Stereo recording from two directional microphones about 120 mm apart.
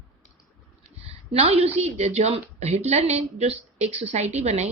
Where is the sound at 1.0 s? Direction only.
55° right (ahead or behind).